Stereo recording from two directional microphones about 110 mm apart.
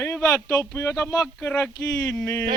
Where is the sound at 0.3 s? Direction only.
25° left (ahead or behind).